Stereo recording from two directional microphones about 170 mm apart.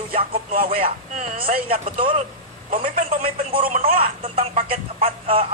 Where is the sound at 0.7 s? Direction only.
40° right (ahead or behind).